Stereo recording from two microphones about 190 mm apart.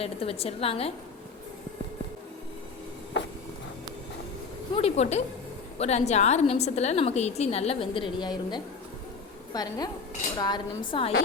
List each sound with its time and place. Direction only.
0.0 s a woman's voice: 30° left (ahead or behind)
4.7 s a woman's voice: 35° left (ahead or behind)